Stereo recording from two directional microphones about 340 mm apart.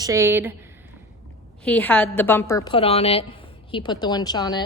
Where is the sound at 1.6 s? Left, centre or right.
Centre.